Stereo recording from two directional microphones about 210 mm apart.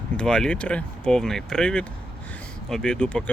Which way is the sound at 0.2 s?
5° left (ahead or behind).